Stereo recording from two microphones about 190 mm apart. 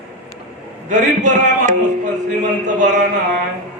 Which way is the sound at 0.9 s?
40° right (ahead or behind).